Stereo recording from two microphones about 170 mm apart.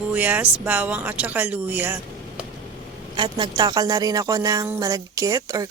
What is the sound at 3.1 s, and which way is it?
Speech, 25° right (ahead or behind).